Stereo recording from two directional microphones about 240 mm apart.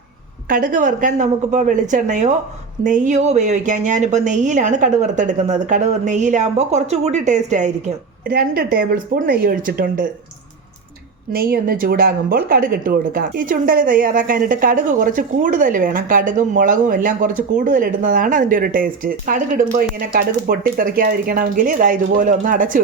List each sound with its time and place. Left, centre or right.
0.4 s a woman's voice: right
11.3 s a woman's voice: right